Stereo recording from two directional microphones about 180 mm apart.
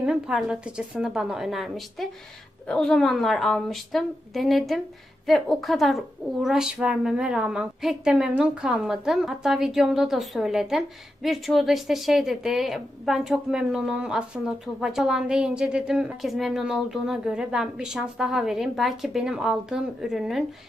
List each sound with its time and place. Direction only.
0.0 s a woman's voice: 5° right (ahead or behind)